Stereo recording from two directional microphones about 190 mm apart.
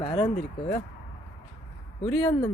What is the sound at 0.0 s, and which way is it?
Speech, 25° left (ahead or behind).